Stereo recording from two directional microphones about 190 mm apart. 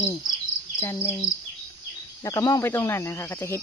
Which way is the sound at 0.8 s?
15° left (ahead or behind).